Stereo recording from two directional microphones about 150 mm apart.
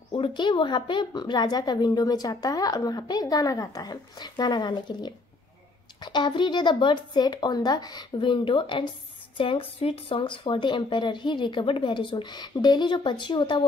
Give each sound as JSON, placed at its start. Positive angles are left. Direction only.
{"t": 0.1, "sound": "speech", "side_deg": 30}